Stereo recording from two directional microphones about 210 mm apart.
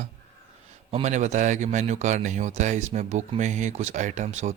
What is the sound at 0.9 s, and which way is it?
Speech, 30° right (ahead or behind).